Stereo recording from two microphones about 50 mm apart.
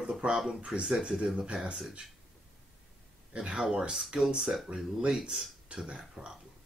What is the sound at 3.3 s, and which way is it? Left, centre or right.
Speech, centre.